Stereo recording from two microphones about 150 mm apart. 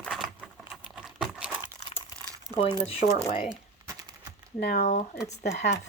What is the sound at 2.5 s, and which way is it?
Speech, 35° left (ahead or behind).